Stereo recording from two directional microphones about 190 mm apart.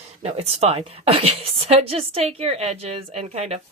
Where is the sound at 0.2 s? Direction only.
35° right (ahead or behind).